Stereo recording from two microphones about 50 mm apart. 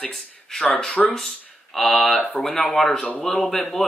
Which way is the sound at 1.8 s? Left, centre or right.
Centre.